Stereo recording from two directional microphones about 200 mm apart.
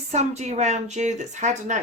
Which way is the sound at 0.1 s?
35° right (ahead or behind).